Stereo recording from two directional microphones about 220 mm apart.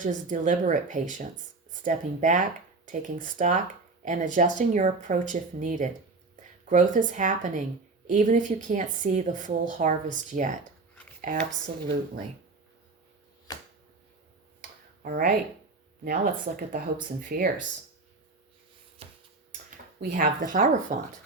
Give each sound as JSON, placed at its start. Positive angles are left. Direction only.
{"t": 0.0, "sound": "a woman's voice", "side_deg": -35}
{"t": 15.0, "sound": "a woman's voice", "side_deg": -40}
{"t": 19.0, "sound": "a sound", "side_deg": -25}
{"t": 19.7, "sound": "a woman's voice", "side_deg": -40}